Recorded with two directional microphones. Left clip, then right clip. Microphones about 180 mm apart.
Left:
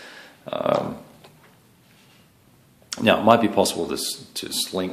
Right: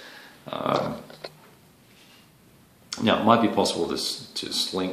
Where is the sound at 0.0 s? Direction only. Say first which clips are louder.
Left 3 dB; 40° left (ahead or behind).